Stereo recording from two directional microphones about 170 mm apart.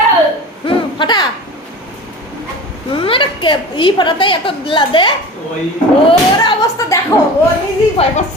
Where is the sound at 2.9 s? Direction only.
30° left (ahead or behind).